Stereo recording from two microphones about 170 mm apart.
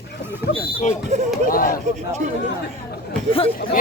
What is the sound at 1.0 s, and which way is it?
Speech, 40° right (ahead or behind).